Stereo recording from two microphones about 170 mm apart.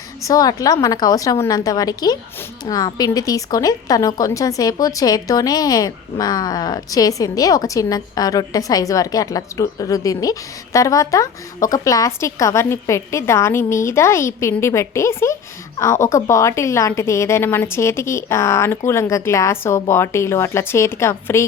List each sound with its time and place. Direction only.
0.3 s a woman's voice: 20° left (ahead or behind)